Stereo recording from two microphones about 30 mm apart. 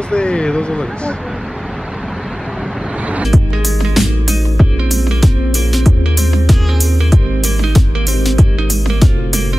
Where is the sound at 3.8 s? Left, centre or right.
Centre.